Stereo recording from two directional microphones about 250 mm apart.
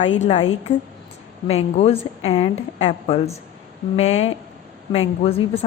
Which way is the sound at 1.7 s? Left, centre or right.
Left.